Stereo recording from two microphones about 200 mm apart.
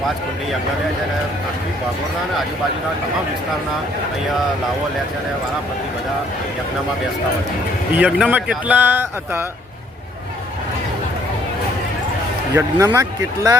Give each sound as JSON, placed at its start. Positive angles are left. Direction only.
{"t": 7.9, "sound": "speech", "side_deg": -5}
{"t": 12.5, "sound": "speech", "side_deg": -15}